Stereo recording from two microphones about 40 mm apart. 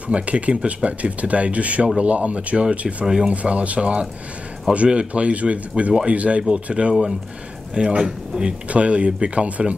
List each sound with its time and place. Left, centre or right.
0.1 s speech: right